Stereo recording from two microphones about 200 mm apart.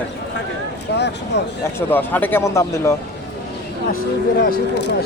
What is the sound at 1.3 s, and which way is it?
Speech, 60° left (ahead or behind).